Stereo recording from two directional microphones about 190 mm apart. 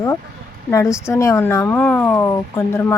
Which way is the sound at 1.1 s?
15° left (ahead or behind).